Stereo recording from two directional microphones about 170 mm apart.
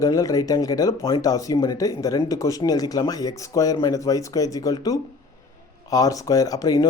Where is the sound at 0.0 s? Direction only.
20° left (ahead or behind).